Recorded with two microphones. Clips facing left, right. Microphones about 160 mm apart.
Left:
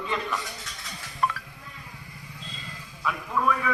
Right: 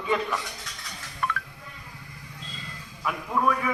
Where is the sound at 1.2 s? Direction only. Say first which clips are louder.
Left 3 dB; 35° left (ahead or behind).